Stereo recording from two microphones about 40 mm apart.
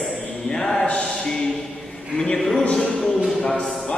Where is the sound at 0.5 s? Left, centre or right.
Centre.